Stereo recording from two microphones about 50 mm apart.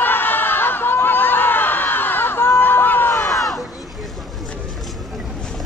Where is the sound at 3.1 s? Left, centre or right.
Left.